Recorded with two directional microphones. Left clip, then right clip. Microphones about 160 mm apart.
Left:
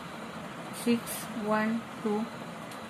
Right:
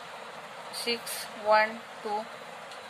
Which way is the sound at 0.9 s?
60° right (ahead or behind).